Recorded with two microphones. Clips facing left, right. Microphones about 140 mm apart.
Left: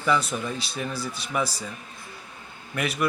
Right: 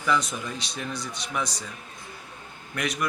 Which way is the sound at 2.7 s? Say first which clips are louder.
Left 2 dB; 5° left (ahead or behind).